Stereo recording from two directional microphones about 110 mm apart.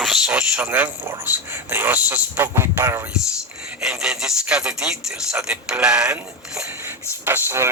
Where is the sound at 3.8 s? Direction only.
5° right (ahead or behind); by 7.7 s 20° right (ahead or behind).